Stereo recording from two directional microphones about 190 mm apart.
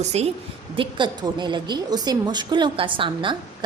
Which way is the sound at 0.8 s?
25° right (ahead or behind).